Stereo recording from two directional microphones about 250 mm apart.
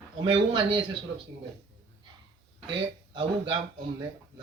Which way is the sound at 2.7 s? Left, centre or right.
Centre.